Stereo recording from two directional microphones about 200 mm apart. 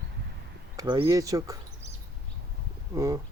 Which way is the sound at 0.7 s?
20° right (ahead or behind).